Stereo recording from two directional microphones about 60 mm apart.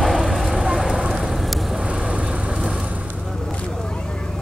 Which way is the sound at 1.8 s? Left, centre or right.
Centre.